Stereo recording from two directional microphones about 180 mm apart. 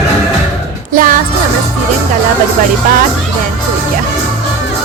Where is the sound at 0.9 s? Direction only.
50° right (ahead or behind).